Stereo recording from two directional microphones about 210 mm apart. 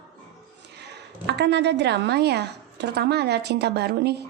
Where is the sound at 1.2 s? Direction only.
55° right (ahead or behind).